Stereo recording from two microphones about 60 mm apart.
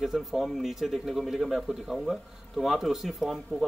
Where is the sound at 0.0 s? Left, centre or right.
Centre.